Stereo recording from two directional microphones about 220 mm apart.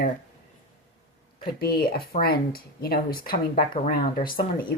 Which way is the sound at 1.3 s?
40° left (ahead or behind).